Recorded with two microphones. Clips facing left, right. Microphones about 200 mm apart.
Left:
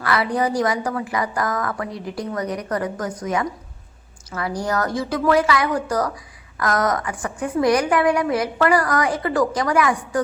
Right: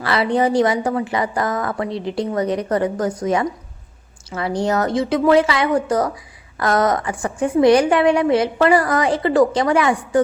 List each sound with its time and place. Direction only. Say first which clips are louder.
0.0 s a woman's voice: right 3 dB; 25° right (ahead or behind)